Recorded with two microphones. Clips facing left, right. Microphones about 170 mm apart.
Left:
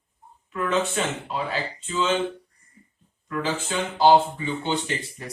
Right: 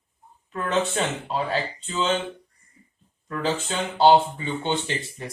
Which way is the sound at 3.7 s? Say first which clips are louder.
Even; 30° right (ahead or behind).